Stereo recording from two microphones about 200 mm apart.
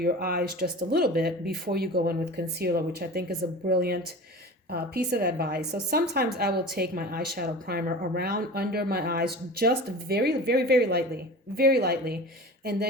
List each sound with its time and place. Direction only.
0.0 s a woman's voice: 50° right (ahead or behind)